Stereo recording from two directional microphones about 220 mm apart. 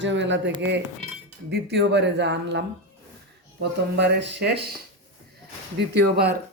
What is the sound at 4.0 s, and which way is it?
Speech, 50° right (ahead or behind).